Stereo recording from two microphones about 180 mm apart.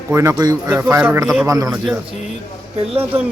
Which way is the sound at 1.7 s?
Centre (ahead or behind).